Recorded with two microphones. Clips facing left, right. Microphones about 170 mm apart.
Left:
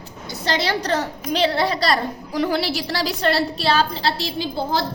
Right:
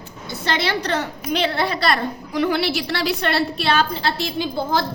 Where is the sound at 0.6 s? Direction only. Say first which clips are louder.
Left 1 dB; 40° left (ahead or behind).